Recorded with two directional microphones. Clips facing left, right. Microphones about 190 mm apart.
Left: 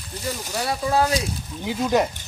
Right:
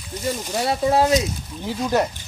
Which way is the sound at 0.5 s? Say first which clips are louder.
Right 3 dB; 25° right (ahead or behind).